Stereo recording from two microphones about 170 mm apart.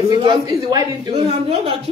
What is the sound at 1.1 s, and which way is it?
Speech, 35° right (ahead or behind).